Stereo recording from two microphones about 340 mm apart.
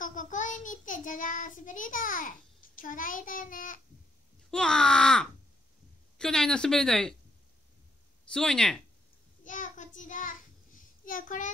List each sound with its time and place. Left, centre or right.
0.0 s child singing: left
4.5 s a woman's voice: centre
8.3 s a woman's voice: centre
9.4 s child singing: left